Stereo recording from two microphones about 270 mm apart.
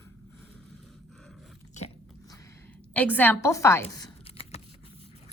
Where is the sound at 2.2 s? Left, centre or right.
Centre.